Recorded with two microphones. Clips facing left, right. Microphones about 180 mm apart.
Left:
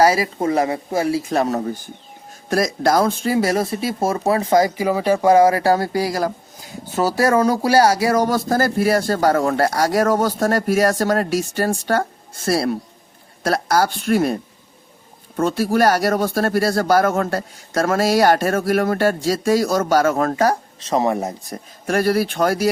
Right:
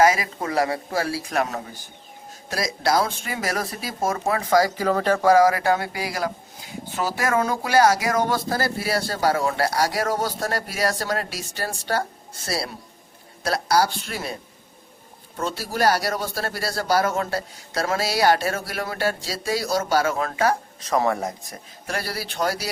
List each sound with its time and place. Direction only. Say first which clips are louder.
0.0 s speech: left 3 dB; 35° left (ahead or behind)
2.5 s speech: left 6 dB; 50° left (ahead or behind); by 4.7 s 25° left (ahead or behind)
4.8 s speech: left 3 dB; 10° left (ahead or behind)
5.2 s speech: left 4 dB; 25° left (ahead or behind); by 14.3 s 55° left (ahead or behind)
15.4 s speech: left 8 dB; 50° left (ahead or behind)
20.8 s speech: left 3 dB; 20° left (ahead or behind)
21.5 s speech: left 9 dB; 50° left (ahead or behind)